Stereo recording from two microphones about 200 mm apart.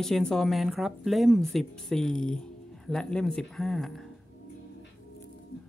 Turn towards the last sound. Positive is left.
turn(degrees=0)  # may be behind; listen again after turning